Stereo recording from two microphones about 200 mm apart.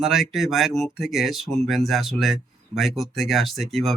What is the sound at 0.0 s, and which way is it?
Speech, centre (ahead or behind).